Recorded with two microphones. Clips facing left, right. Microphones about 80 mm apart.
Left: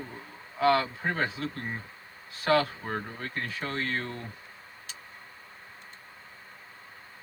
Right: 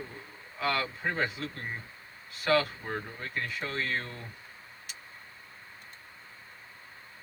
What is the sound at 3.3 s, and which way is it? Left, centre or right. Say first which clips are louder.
Speech: even; left.